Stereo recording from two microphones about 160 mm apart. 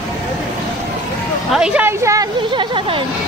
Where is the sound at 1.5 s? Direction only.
5° right (ahead or behind); by 3.0 s 30° right (ahead or behind).